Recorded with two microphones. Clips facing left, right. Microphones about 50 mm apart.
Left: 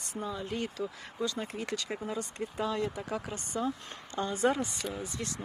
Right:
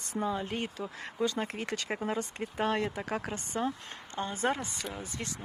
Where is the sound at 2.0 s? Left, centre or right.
Right.